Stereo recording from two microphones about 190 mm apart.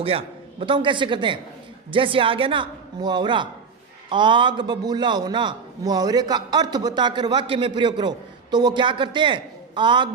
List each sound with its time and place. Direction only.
0.0 s a man's voice: 30° right (ahead or behind)